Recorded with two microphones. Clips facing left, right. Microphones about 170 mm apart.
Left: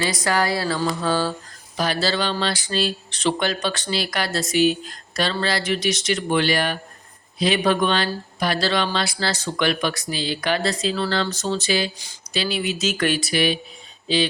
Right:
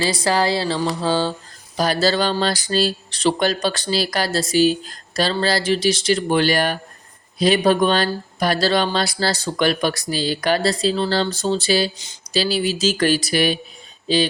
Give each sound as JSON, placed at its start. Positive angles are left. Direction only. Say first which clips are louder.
{"t": 0.0, "sound": "speech", "louder": "right 3 dB", "side_deg": -30}
{"t": 1.7, "sound": "speech", "louder": "right 4 dB", "side_deg": -40}